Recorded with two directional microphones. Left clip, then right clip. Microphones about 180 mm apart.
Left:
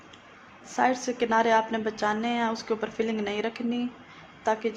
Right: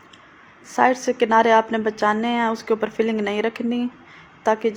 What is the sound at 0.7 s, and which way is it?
A woman's voice, 25° right (ahead or behind).